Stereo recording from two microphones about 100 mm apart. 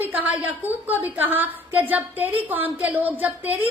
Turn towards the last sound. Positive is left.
turn(degrees=-15)  # may be behind; listen again after turning